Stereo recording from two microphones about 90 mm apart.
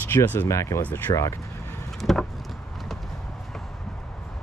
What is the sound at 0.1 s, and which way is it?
Speech, 20° left (ahead or behind).